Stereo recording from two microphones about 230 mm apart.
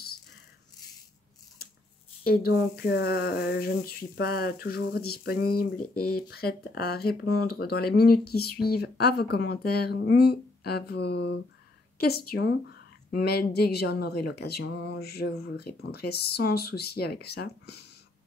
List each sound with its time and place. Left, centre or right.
2.2 s speech: left